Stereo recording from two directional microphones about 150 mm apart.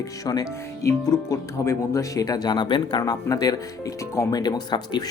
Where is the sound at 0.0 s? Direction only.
25° left (ahead or behind).